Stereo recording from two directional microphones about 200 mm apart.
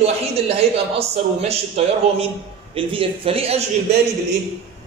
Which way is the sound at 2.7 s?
30° right (ahead or behind).